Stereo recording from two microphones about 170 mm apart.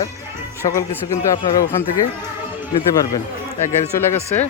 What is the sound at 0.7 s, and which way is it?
Speech, 20° left (ahead or behind).